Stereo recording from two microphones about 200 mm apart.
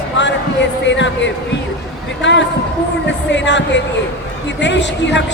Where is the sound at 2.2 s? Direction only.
65° left (ahead or behind).